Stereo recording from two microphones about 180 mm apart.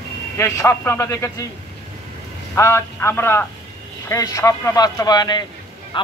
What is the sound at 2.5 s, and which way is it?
A man's voice, 15° left (ahead or behind).